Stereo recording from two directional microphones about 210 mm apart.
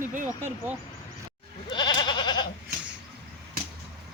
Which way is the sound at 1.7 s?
20° left (ahead or behind).